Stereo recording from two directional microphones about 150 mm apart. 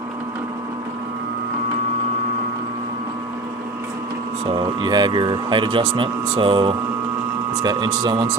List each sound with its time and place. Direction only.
4.5 s speech: 30° right (ahead or behind)